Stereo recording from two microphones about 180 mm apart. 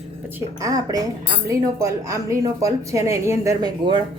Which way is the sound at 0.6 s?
20° right (ahead or behind).